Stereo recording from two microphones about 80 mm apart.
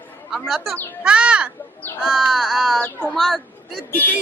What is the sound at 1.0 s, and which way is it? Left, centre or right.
Speech, centre.